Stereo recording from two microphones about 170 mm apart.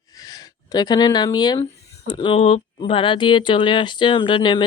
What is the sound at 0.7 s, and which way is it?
Speech, 25° left (ahead or behind).